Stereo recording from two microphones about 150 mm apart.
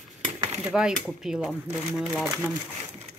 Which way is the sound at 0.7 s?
5° right (ahead or behind).